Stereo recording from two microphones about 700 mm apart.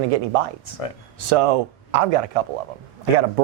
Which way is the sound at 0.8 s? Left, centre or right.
Left.